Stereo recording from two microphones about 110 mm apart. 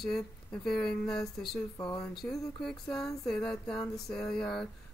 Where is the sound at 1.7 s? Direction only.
35° left (ahead or behind).